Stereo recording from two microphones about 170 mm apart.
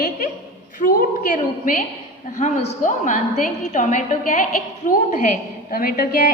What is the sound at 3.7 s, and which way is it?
A woman's voice, 45° left (ahead or behind).